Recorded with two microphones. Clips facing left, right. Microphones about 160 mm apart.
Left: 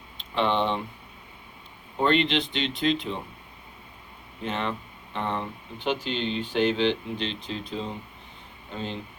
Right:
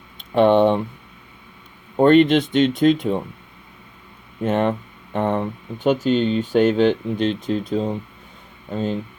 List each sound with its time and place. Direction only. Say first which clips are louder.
0.3 s speech: right 10 dB; 50° right (ahead or behind)
2.0 s speech: right 10 dB; 50° right (ahead or behind)
4.4 s speech: right 10 dB; 50° right (ahead or behind)